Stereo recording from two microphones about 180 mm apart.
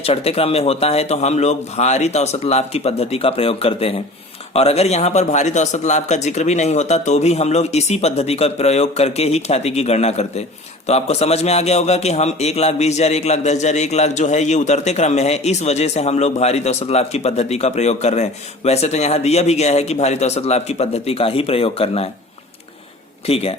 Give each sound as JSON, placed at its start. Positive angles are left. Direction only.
{"t": 0.0, "sound": "a man's voice", "side_deg": 35}
{"t": 23.2, "sound": "a man's voice", "side_deg": 35}